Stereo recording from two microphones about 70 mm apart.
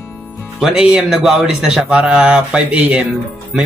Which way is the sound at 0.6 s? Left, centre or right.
Centre.